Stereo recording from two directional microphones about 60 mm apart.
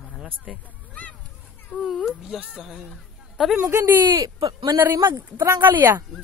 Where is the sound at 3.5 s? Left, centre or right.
Right.